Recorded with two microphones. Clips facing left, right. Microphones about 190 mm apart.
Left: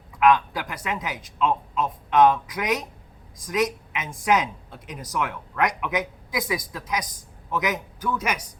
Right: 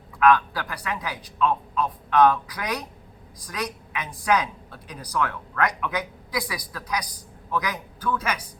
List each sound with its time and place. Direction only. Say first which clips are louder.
0.2 s a woman's voice: even; 20° left (ahead or behind)